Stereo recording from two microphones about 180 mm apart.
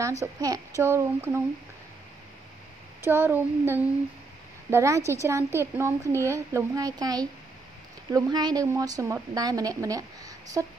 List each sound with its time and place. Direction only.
0.2 s a woman's voice: 20° right (ahead or behind)
3.0 s a woman's voice: 10° right (ahead or behind)